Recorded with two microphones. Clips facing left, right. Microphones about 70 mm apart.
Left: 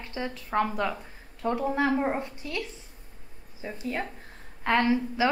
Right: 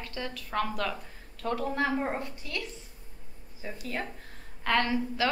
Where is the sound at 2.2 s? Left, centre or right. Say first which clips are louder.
Left 3 dB; left.